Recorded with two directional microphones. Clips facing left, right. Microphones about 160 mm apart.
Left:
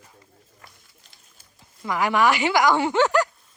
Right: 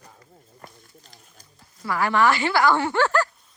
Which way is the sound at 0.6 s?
40° right (ahead or behind).